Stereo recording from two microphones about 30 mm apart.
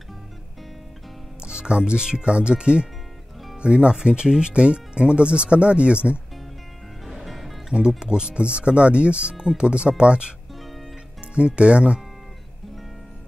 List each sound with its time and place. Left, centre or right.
1.4 s speech: right
7.1 s music: centre
8.0 s speech: right
11.3 s speech: right